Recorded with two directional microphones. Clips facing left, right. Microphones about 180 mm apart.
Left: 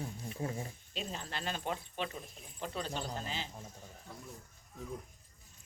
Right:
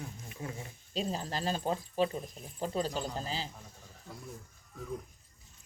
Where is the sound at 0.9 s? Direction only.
35° right (ahead or behind).